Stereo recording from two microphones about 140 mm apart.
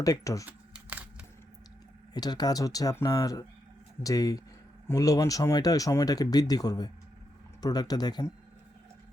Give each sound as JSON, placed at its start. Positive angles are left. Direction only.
{"t": 0.0, "sound": "speech", "side_deg": 25}
{"t": 0.4, "sound": "a sound", "side_deg": -10}
{"t": 2.1, "sound": "speech", "side_deg": 30}